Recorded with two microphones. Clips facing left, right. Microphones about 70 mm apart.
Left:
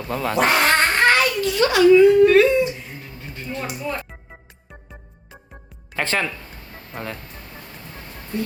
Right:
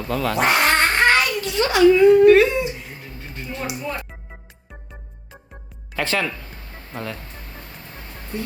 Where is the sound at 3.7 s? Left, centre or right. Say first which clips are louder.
Left 1 dB; centre.